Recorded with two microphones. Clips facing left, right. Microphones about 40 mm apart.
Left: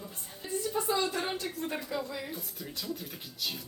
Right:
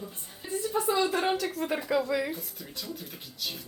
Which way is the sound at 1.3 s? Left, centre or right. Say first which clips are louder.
Right 5 dB; right.